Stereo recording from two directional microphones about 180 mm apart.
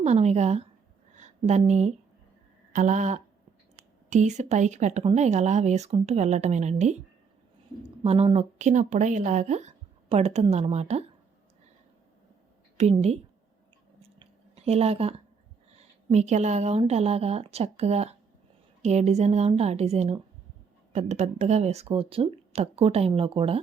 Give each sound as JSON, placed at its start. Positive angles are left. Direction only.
{"t": 0.0, "sound": "speech", "side_deg": -40}
{"t": 1.1, "sound": "a sound", "side_deg": -40}
{"t": 4.1, "sound": "speech", "side_deg": -40}
{"t": 8.0, "sound": "speech", "side_deg": -35}
{"t": 12.7, "sound": "a woman's voice", "side_deg": -35}
{"t": 14.0, "sound": "chewing", "side_deg": -35}
{"t": 15.8, "sound": "speech", "side_deg": -40}